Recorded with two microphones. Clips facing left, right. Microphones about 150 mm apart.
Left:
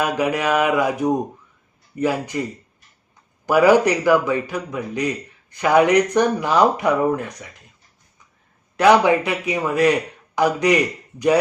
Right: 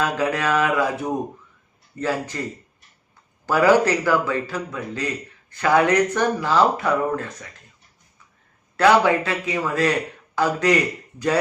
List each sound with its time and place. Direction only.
0.0 s a man's voice: 15° left (ahead or behind)
8.7 s a man's voice: 15° left (ahead or behind)